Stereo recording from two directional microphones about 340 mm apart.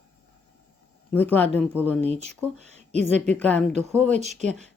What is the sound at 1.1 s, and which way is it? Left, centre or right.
Speech, centre.